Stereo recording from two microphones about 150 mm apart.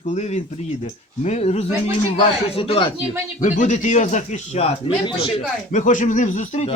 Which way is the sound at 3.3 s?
55° left (ahead or behind).